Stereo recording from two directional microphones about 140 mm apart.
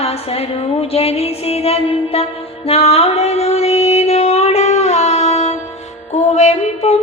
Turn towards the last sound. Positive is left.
turn(degrees=50)  # may be behind; listen again after turning